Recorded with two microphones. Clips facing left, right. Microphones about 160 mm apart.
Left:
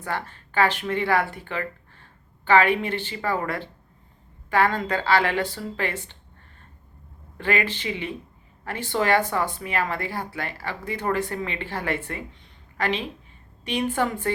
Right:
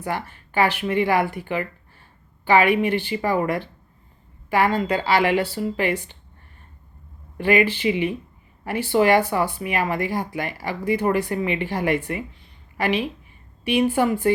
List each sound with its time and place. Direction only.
0.0 s speech: 10° right (ahead or behind)
7.3 s speech: 10° right (ahead or behind)